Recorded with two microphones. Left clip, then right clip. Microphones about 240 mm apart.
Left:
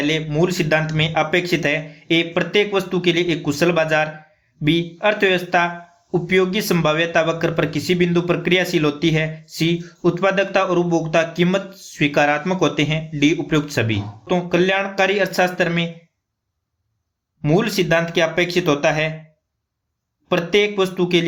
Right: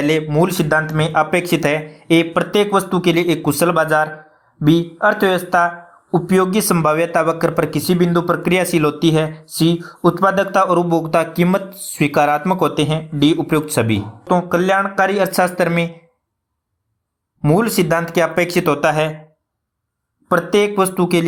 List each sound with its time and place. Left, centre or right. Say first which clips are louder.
0.0 s speech: right 4 dB; right
7.9 s speech: right 2 dB; centre
8.4 s speech: right 2 dB; right
9.8 s speech: right 3 dB; centre
10.4 s speech: right 3 dB; right
17.4 s speech: right 3 dB; right
20.5 s speech: even; right